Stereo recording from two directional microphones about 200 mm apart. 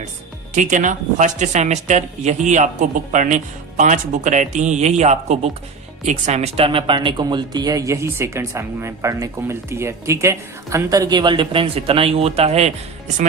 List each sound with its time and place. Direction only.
0.5 s speech: 40° right (ahead or behind)